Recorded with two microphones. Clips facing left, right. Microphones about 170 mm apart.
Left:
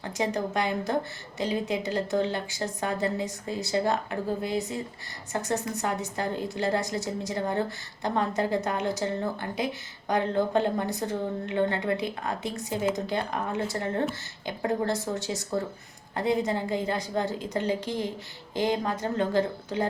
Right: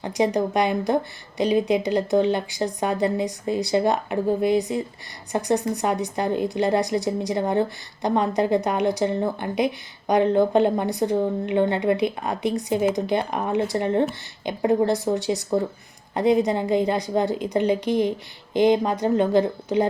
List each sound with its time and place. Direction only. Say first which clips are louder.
0.0 s speech: right 7 dB; 15° right (ahead or behind)